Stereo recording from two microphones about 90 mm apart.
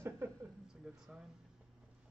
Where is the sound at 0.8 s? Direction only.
5° right (ahead or behind).